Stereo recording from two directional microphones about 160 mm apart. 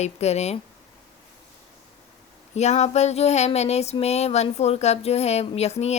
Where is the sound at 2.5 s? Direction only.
45° left (ahead or behind).